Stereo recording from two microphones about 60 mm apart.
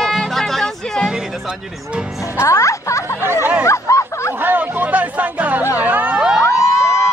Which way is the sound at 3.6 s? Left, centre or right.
Left.